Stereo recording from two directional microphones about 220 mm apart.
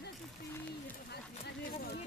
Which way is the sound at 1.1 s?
50° left (ahead or behind).